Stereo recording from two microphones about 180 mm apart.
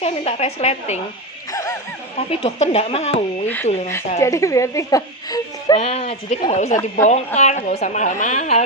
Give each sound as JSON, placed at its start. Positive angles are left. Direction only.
{"t": 0.0, "sound": "speech", "side_deg": 35}
{"t": 1.5, "sound": "a sound", "side_deg": 15}
{"t": 2.1, "sound": "speech", "side_deg": 35}
{"t": 3.4, "sound": "speech", "side_deg": 10}
{"t": 5.7, "sound": "speech", "side_deg": 35}